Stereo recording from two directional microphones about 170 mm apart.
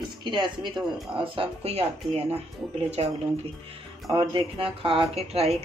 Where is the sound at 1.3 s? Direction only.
35° right (ahead or behind).